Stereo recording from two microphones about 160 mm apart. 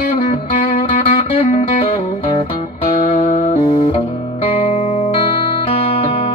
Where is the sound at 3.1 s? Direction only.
50° left (ahead or behind).